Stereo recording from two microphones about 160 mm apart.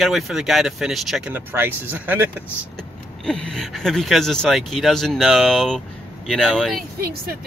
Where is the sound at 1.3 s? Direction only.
15° right (ahead or behind).